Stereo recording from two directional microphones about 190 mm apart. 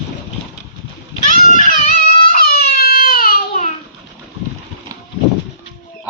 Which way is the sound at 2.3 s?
55° left (ahead or behind).